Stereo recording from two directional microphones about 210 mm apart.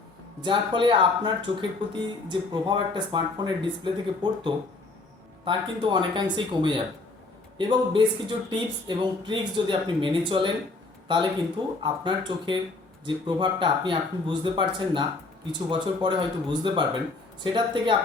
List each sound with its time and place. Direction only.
0.4 s speech: 25° right (ahead or behind)
11.8 s speech: 20° right (ahead or behind)